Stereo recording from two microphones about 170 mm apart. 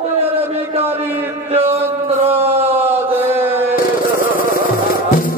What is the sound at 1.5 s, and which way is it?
Chant, 35° right (ahead or behind).